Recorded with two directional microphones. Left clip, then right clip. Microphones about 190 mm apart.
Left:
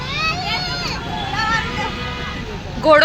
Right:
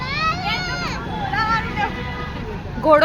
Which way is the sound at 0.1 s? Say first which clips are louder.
Left 1 dB; centre (ahead or behind).